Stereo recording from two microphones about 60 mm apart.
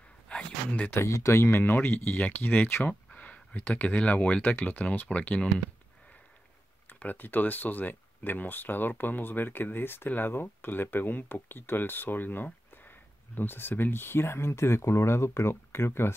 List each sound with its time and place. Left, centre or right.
0.3 s a sound: centre
1.0 s speech: left
1.6 s speech: left
7.0 s speech: left